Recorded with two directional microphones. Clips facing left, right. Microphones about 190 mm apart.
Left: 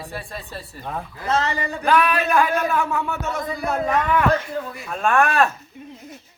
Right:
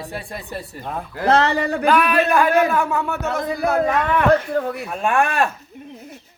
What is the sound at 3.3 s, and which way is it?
Speech, 70° right (ahead or behind).